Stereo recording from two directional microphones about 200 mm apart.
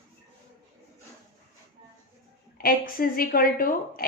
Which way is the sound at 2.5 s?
45° left (ahead or behind).